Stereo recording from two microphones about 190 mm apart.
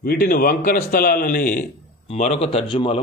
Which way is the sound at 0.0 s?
50° left (ahead or behind).